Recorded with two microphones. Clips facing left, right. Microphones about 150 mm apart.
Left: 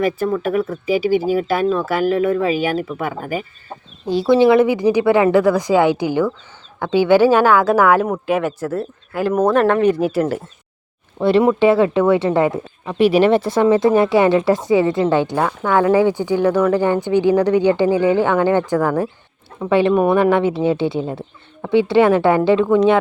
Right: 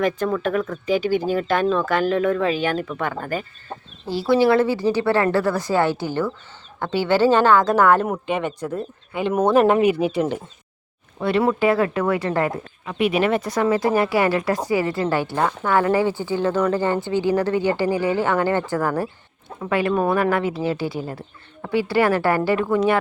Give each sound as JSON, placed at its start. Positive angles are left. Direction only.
{"t": 0.0, "sound": "speech", "side_deg": 5}
{"t": 11.4, "sound": "speech", "side_deg": 25}
{"t": 15.4, "sound": "speech", "side_deg": 10}
{"t": 18.8, "sound": "speech", "side_deg": -5}
{"t": 19.9, "sound": "speech", "side_deg": 10}
{"t": 20.3, "sound": "speech", "side_deg": 25}
{"t": 21.1, "sound": "speech", "side_deg": 0}
{"t": 21.7, "sound": "speech", "side_deg": 20}